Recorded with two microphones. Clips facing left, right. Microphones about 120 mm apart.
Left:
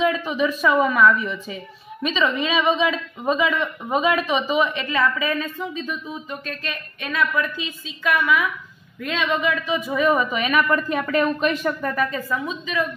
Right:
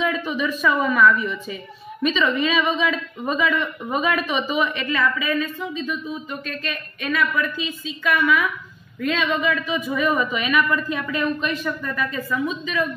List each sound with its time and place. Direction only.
0.0 s a woman's voice: 25° left (ahead or behind)
9.8 s a woman's voice: 30° left (ahead or behind)